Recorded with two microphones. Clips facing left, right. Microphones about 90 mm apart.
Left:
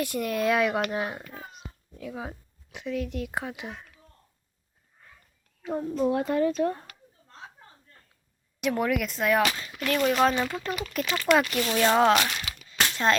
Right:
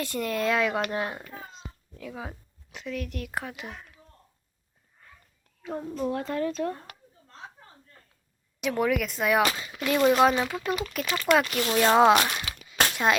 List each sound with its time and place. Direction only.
0.0 s speech: 10° left (ahead or behind)
2.7 s a woman's voice: 15° left (ahead or behind)
5.6 s a woman's voice: 10° left (ahead or behind)
8.6 s speech: centre (ahead or behind)
12.7 s a sound: 45° right (ahead or behind)